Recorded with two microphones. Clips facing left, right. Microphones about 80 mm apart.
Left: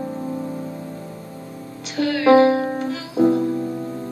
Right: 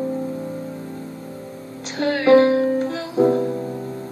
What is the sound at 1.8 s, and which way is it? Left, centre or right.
Music, right.